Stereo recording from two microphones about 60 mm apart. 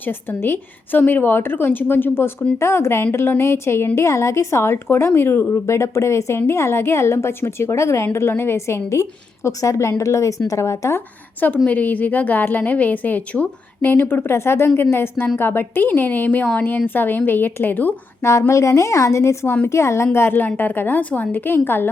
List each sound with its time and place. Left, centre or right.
0.0 s a woman's voice: left
9.5 s a woman's voice: left
11.3 s a woman's voice: left
13.9 s a woman's voice: left
18.2 s a woman's voice: left
20.1 s a woman's voice: left